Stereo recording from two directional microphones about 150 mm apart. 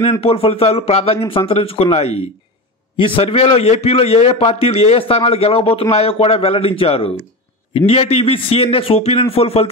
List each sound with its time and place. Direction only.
0.2 s a man's voice: 40° left (ahead or behind)